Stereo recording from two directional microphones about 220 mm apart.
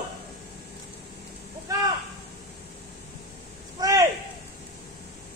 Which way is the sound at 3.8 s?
15° right (ahead or behind).